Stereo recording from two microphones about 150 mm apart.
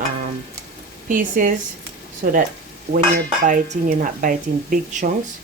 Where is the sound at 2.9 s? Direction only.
65° right (ahead or behind).